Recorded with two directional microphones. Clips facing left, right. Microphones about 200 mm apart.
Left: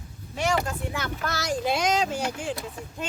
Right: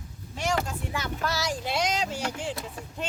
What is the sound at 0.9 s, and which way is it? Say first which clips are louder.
Speech: even; 55° left (ahead or behind).